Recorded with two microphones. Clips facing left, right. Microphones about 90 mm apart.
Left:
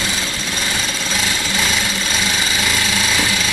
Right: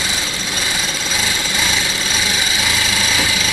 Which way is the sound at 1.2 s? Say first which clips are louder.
Even; centre (ahead or behind).